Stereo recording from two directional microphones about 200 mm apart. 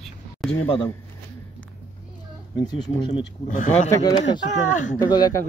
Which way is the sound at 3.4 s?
40° left (ahead or behind).